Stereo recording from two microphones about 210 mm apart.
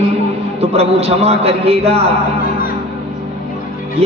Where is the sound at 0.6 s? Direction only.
30° right (ahead or behind).